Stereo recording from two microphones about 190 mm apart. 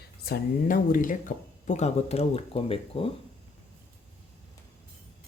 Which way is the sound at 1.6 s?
35° left (ahead or behind).